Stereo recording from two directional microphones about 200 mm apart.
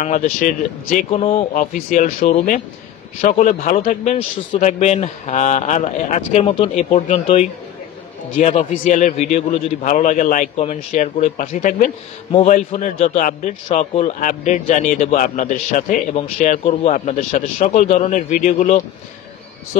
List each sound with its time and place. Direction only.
0.0 s a man's voice: 40° left (ahead or behind)
1.5 s a man's voice: 40° left (ahead or behind)
12.3 s a man's voice: 30° left (ahead or behind)
12.5 s a man's voice: 40° left (ahead or behind)